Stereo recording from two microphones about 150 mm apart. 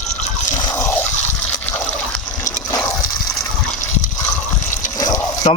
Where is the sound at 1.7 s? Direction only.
10° left (ahead or behind).